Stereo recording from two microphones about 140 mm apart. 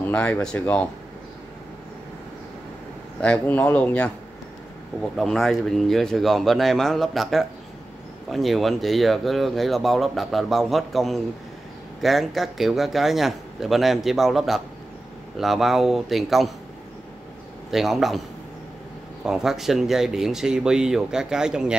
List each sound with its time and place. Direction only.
0.0 s speech: 10° left (ahead or behind)
3.2 s speech: 10° left (ahead or behind)
5.1 s speech: centre (ahead or behind)
17.6 s speech: centre (ahead or behind)
19.2 s speech: 5° right (ahead or behind)